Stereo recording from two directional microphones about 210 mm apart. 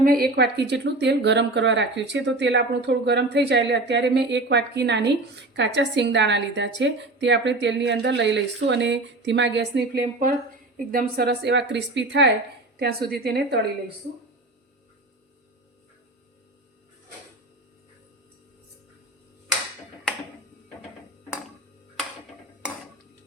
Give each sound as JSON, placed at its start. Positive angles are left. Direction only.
{"t": 0.0, "sound": "a woman's voice", "side_deg": -45}